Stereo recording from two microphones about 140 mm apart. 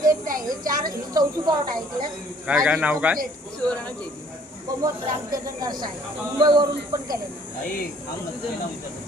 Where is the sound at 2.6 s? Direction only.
5° right (ahead or behind).